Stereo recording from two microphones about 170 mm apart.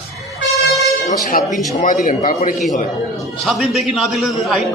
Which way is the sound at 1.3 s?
55° left (ahead or behind).